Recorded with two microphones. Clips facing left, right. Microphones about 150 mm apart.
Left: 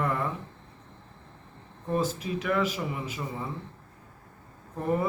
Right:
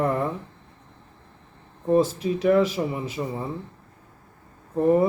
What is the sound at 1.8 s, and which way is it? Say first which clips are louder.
Speech: right 8 dB; 35° right (ahead or behind).